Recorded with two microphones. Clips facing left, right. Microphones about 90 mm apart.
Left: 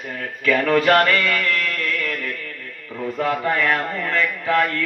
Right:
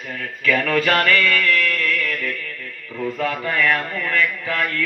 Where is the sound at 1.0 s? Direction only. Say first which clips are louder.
Right 1 dB; 30° left (ahead or behind).